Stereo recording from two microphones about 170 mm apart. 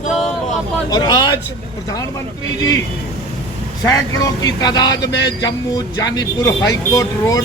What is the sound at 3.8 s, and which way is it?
Speech, 20° left (ahead or behind).